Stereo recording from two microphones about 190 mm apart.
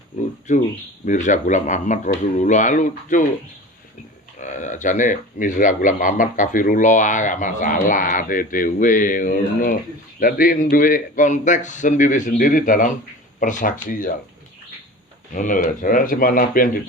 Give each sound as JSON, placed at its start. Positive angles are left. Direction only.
{"t": 0.5, "sound": "speech", "side_deg": 40}
{"t": 4.4, "sound": "speech", "side_deg": 40}
{"t": 15.3, "sound": "speech", "side_deg": 45}